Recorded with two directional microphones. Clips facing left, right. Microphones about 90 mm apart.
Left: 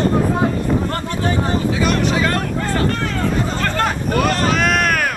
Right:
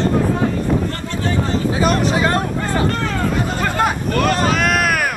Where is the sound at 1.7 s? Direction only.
35° right (ahead or behind).